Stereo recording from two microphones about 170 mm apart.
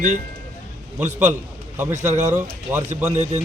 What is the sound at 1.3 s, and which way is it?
Speech, 10° right (ahead or behind).